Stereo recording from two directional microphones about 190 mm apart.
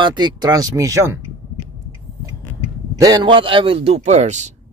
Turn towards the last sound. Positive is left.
turn(degrees=-40)  # may be behind; listen again after turning